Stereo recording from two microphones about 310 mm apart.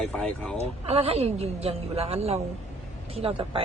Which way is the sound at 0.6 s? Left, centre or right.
Centre.